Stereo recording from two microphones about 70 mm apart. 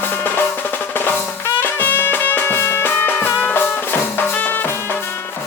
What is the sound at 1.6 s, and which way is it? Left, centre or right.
Music, left.